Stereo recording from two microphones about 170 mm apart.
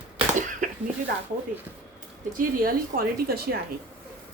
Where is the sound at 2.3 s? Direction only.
55° right (ahead or behind).